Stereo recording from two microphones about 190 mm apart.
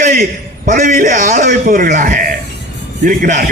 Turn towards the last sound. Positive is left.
turn(degrees=-45)  # may be behind; listen again after turning